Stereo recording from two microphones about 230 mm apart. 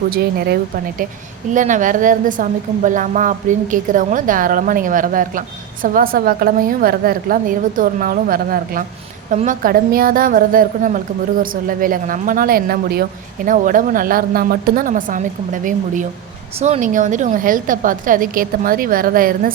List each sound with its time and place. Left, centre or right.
0.1 s speech: right
1.5 s a woman's voice: right
16.6 s a woman's voice: right